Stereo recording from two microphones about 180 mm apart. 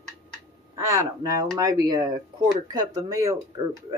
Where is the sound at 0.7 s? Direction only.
20° right (ahead or behind).